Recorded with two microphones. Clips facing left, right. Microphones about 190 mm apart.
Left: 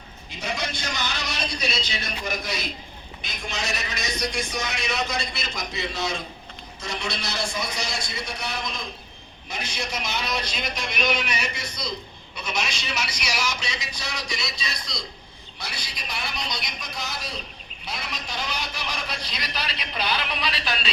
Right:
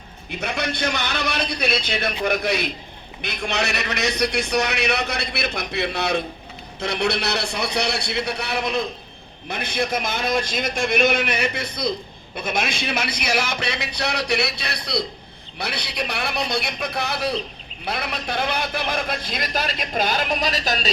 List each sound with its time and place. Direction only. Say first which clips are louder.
0.3 s a man's voice: right 5 dB; 60° right (ahead or behind); by 20.9 s 40° right (ahead or behind)